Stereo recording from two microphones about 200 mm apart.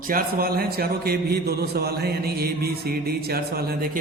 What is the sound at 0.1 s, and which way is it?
A man's voice, 45° right (ahead or behind).